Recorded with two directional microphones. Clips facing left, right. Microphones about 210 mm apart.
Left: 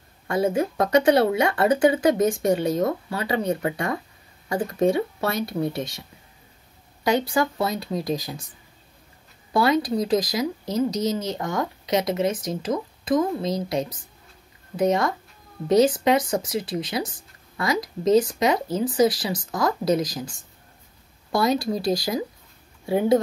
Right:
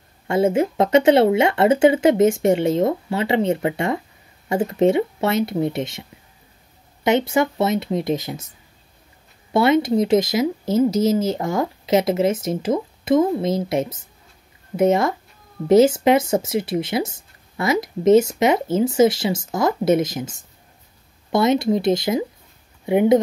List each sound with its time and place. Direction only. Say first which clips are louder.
0.3 s speech: right 4 dB; 25° right (ahead or behind)
9.5 s speech: right 4 dB; 25° right (ahead or behind)